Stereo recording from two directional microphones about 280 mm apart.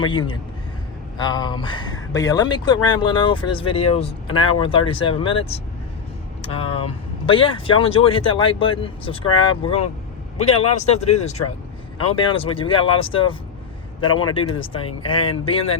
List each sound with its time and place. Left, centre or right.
0.0 s speech: centre